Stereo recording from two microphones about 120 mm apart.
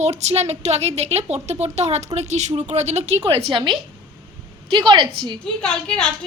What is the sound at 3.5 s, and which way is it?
A woman's voice, 40° right (ahead or behind).